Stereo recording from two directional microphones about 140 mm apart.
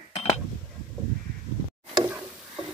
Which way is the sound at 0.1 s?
45° left (ahead or behind).